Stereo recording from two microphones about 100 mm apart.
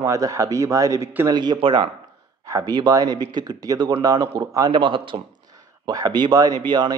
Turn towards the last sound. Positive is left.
turn(degrees=-45)  # may be behind; listen again after turning